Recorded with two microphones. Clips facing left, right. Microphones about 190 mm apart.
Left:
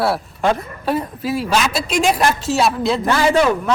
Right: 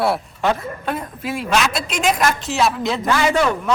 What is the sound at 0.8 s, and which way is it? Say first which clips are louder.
A woman's voice: left 6 dB; 30° left (ahead or behind).